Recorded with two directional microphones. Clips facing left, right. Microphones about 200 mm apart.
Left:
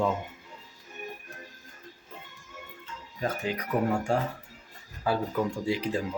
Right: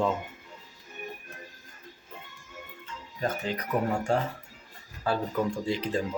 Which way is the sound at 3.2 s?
10° left (ahead or behind).